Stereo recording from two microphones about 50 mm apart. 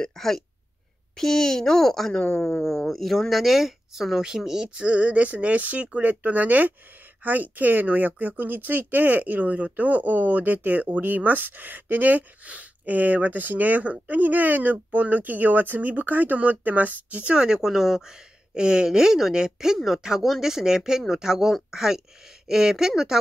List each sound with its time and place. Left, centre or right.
0.0 s speech: centre
2.2 s speech: centre